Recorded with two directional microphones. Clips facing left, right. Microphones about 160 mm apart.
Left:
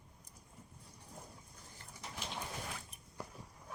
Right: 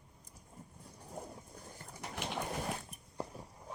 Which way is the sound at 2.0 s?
65° right (ahead or behind).